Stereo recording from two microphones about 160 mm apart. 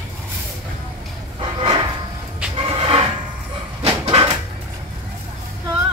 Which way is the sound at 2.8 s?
35° right (ahead or behind).